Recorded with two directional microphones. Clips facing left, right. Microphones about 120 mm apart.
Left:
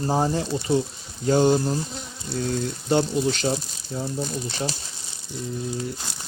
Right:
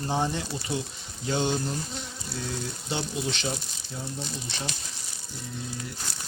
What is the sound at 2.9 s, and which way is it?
Speech, 45° left (ahead or behind).